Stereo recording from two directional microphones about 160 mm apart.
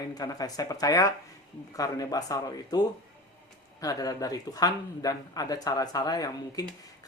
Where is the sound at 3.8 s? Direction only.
20° left (ahead or behind).